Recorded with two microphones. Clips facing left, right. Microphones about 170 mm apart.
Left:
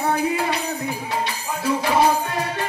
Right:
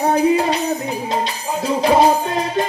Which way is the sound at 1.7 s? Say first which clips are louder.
Right 4 dB; 20° right (ahead or behind).